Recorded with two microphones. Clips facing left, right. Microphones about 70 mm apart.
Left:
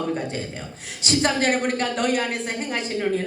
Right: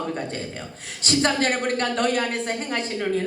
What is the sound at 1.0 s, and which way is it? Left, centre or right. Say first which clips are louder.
A woman's voice: even; right.